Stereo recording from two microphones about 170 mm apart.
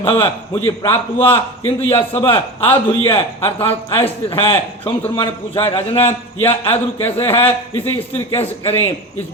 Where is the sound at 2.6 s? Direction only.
10° left (ahead or behind).